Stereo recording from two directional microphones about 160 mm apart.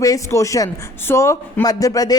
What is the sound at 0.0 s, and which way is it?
A woman's voice, 20° left (ahead or behind).